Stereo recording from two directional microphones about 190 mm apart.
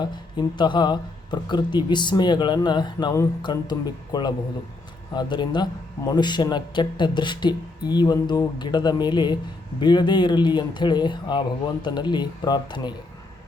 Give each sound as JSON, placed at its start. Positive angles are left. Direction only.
{"t": 0.0, "sound": "speech", "side_deg": 25}